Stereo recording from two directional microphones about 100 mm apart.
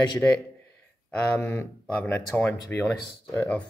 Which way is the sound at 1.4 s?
25° left (ahead or behind).